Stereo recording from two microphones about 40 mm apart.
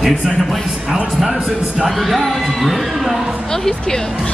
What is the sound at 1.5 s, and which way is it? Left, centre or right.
Speech, centre.